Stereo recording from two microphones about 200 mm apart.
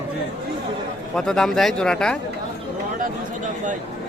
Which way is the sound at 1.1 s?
5° left (ahead or behind).